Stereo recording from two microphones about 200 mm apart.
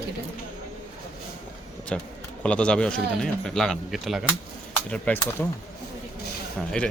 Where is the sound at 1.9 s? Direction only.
5° left (ahead or behind).